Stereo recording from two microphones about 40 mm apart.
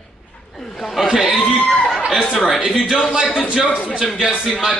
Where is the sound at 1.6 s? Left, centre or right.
Centre.